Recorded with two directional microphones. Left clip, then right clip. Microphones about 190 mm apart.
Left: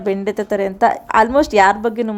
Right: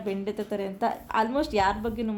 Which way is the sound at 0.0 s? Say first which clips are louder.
Left 12 dB; 40° left (ahead or behind).